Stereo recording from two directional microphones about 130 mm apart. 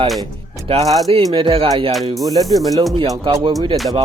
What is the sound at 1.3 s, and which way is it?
Speech, 45° right (ahead or behind).